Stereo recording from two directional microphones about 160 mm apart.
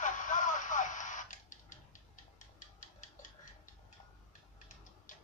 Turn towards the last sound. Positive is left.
turn(degrees=55)  # may be behind; listen again after turning